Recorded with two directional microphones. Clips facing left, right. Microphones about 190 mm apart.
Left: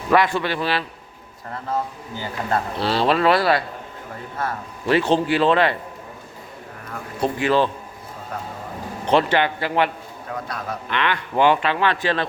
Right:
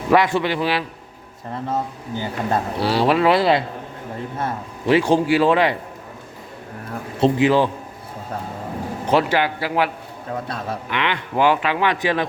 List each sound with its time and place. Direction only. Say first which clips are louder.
0.1 s speech: right 2 dB; 20° right (ahead or behind)
7.2 s speech: right 3 dB; 20° right (ahead or behind)
9.0 s speech: even; 5° right (ahead or behind)